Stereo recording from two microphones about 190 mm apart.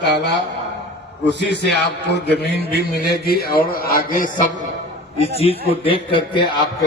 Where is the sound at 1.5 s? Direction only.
60° left (ahead or behind).